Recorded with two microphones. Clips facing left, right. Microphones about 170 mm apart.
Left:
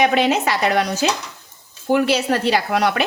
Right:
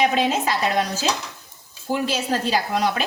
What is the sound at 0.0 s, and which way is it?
A woman's voice, 75° left (ahead or behind).